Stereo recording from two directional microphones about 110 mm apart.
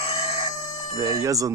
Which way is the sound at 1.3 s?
30° right (ahead or behind).